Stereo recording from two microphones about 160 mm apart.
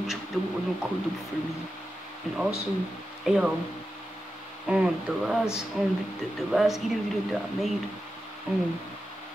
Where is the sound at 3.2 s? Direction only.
5° right (ahead or behind).